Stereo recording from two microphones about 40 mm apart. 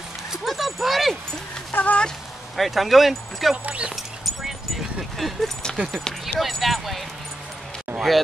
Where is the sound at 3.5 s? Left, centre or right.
Right.